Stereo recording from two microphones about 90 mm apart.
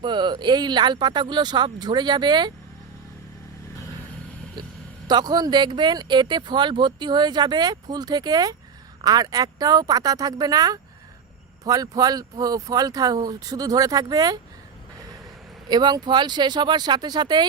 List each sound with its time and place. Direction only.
0.0 s speech: 60° right (ahead or behind)
5.0 s speech: 50° right (ahead or behind)
15.7 s speech: 50° right (ahead or behind)